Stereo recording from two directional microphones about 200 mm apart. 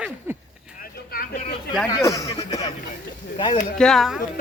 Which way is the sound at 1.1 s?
45° left (ahead or behind).